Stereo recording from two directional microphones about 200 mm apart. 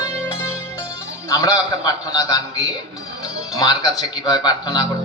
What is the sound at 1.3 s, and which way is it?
A man's voice, 15° left (ahead or behind).